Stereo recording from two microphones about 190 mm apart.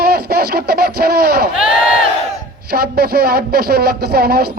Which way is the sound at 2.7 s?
55° right (ahead or behind).